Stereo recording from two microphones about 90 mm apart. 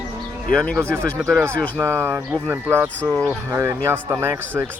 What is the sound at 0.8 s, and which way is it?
Speech, 25° right (ahead or behind).